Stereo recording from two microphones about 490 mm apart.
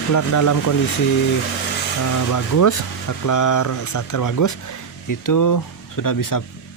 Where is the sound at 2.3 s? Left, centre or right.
Left.